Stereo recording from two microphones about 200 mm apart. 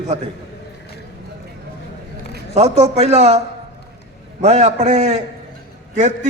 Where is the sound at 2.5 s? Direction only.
30° right (ahead or behind).